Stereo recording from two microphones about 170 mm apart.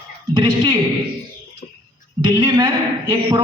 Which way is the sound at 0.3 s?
25° right (ahead or behind).